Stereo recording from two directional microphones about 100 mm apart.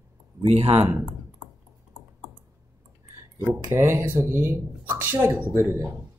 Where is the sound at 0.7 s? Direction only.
20° right (ahead or behind).